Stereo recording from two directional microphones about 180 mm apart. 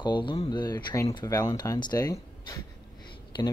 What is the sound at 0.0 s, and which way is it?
Speech, 25° left (ahead or behind).